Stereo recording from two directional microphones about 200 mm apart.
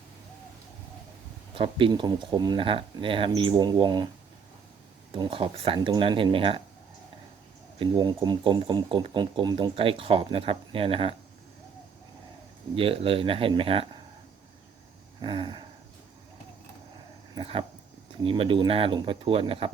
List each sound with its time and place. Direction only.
1.5 s speech: 25° right (ahead or behind)
5.1 s speech: 25° right (ahead or behind)
7.8 s speech: 20° right (ahead or behind)
12.7 s speech: 30° right (ahead or behind)
15.2 s a sound: 25° right (ahead or behind)
17.3 s speech: 25° right (ahead or behind)